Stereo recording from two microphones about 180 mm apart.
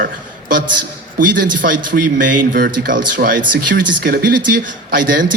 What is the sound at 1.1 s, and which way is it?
Speech, 50° right (ahead or behind).